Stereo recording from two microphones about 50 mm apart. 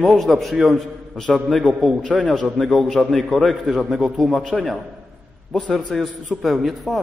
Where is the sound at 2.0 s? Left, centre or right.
Centre.